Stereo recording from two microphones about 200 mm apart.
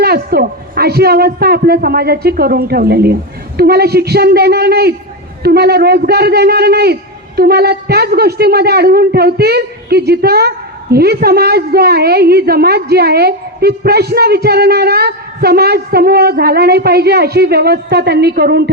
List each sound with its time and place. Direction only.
0.0 s a woman's voice: 50° right (ahead or behind)